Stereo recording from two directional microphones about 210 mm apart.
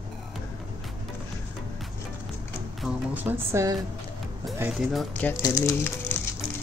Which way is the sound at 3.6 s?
15° right (ahead or behind).